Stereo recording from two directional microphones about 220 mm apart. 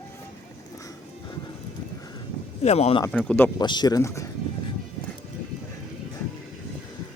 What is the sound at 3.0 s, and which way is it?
Speech, 10° left (ahead or behind).